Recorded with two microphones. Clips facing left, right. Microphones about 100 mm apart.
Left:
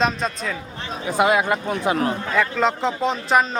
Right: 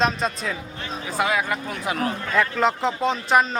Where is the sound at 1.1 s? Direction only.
20° left (ahead or behind).